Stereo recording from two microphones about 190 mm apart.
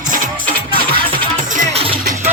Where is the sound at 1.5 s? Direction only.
30° right (ahead or behind).